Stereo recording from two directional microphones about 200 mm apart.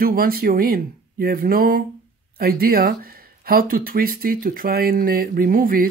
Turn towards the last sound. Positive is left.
turn(degrees=-45)  # may be behind; listen again after turning